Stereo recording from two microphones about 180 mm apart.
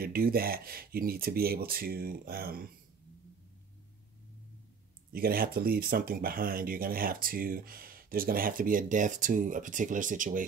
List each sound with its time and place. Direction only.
0.0 s speech: 55° right (ahead or behind)
5.1 s speech: 55° right (ahead or behind)